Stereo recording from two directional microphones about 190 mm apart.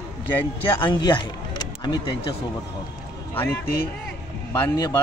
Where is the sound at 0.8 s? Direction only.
25° left (ahead or behind).